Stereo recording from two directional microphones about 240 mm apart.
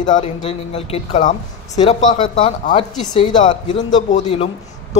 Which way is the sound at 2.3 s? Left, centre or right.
Left.